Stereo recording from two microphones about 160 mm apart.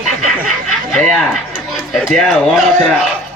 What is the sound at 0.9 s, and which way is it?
A man's voice, centre (ahead or behind).